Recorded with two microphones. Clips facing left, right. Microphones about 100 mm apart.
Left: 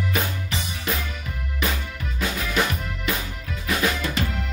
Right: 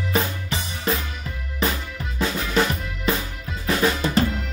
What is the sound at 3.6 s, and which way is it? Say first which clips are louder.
Drum: right 3 dB; 35° right (ahead or behind).